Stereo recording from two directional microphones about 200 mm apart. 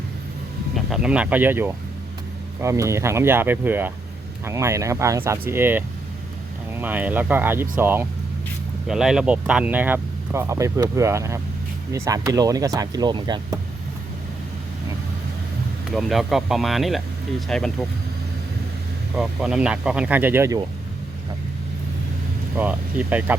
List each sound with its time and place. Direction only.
0.9 s speech: 5° right (ahead or behind); by 13.6 s 20° right (ahead or behind)
15.9 s speech: centre (ahead or behind)
19.1 s speech: 5° right (ahead or behind)
22.5 s speech: 10° right (ahead or behind)